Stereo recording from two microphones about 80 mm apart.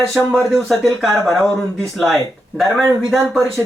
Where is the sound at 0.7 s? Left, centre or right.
Centre.